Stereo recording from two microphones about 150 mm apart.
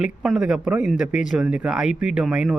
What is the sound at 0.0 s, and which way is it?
Speech, centre (ahead or behind).